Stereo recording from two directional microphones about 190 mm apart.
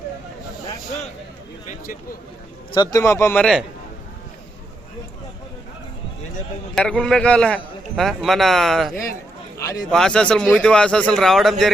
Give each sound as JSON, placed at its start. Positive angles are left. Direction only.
{"t": 2.7, "sound": "a man's voice", "side_deg": 20}
{"t": 6.7, "sound": "a man's voice", "side_deg": 5}
{"t": 9.6, "sound": "a man's voice", "side_deg": 15}
{"t": 9.9, "sound": "a man's voice", "side_deg": 5}